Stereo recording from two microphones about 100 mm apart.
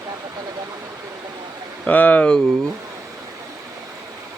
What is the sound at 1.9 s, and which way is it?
Speech, 15° left (ahead or behind).